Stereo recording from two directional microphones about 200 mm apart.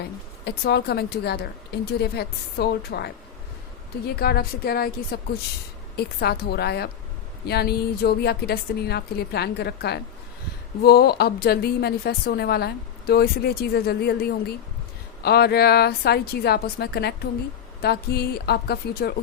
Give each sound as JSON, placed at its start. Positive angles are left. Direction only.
{"t": 0.4, "sound": "a woman's voice", "side_deg": 55}